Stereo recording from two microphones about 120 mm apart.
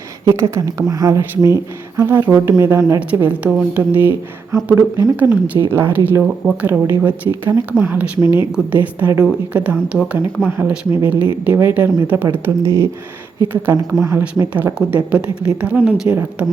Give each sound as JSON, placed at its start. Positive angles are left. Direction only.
{"t": 0.3, "sound": "a woman's voice", "side_deg": -25}